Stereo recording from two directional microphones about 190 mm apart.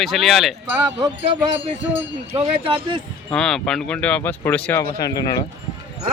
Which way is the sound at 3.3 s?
5° left (ahead or behind).